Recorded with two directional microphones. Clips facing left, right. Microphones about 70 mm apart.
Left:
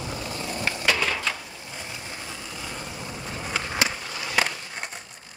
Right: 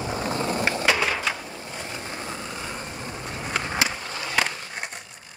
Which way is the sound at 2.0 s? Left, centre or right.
Right.